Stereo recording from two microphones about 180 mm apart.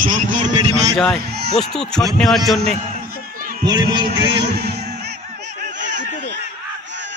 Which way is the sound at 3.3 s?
50° right (ahead or behind).